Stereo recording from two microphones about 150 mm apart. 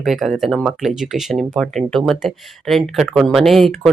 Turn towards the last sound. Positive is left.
turn(degrees=0)  # may be behind; listen again after turning